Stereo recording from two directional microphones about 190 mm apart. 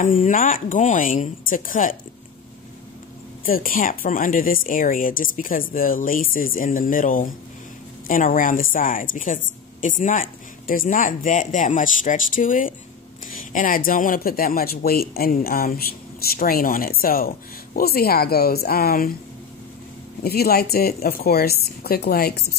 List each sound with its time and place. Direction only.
0.0 s speech: 45° left (ahead or behind)
3.4 s speech: 50° left (ahead or behind)
20.2 s speech: 55° left (ahead or behind)